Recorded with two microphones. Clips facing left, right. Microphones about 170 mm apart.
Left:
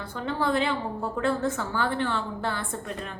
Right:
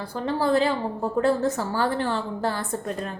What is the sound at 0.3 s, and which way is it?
A woman's voice, 35° right (ahead or behind).